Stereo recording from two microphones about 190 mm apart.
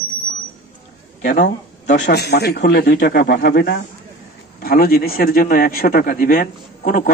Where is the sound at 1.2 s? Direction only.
55° left (ahead or behind).